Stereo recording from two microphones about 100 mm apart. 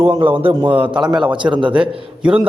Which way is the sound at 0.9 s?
50° right (ahead or behind).